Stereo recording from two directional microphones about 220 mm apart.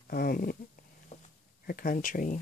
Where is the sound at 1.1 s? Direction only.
30° left (ahead or behind).